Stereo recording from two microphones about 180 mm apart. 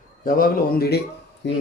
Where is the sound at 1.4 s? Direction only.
80° left.